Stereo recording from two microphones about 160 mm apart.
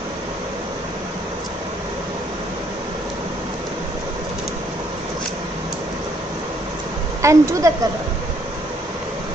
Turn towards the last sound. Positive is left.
turn(degrees=-20)  # may be behind; listen again after turning